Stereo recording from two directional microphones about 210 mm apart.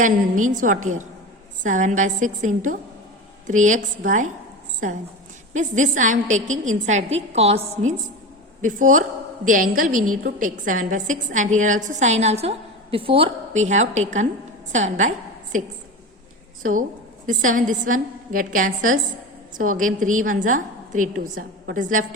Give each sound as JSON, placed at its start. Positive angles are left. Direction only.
{"t": 0.0, "sound": "a woman's voice", "side_deg": -35}
{"t": 5.5, "sound": "a woman's voice", "side_deg": -35}
{"t": 17.2, "sound": "a woman's voice", "side_deg": -40}